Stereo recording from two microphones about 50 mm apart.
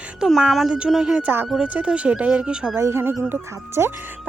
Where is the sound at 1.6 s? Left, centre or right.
Right.